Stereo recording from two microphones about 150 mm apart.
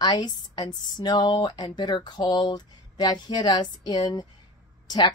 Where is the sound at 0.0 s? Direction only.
30° left (ahead or behind).